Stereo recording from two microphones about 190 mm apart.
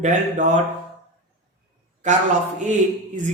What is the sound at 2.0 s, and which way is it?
Speech, 40° right (ahead or behind).